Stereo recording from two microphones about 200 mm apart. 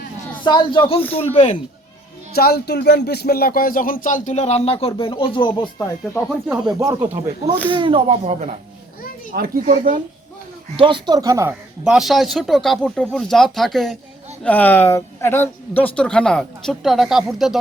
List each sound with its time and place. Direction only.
0.4 s speech: 25° left (ahead or behind)
2.3 s speech: 50° left (ahead or behind); by 5.7 s 25° left (ahead or behind)
5.8 s speech: 10° left (ahead or behind)
6.7 s speech: 15° right (ahead or behind); by 8.5 s 30° right (ahead or behind)
9.3 s speech: 45° right (ahead or behind)
10.8 s speech: 25° right (ahead or behind)
11.9 s speech: centre (ahead or behind)